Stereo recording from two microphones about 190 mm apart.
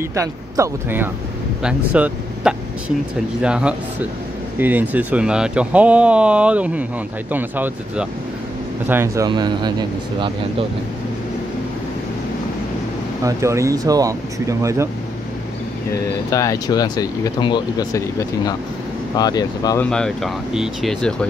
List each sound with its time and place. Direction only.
0.1 s a man's voice: 15° right (ahead or behind)
13.2 s speech: 15° right (ahead or behind)
16.3 s speech: 20° left (ahead or behind)
19.8 s speech: 5° left (ahead or behind)